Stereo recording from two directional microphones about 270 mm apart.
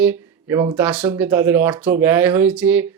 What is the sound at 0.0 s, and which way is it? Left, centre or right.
Speech, centre.